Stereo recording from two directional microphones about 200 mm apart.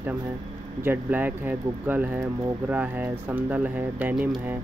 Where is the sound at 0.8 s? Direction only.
10° right (ahead or behind).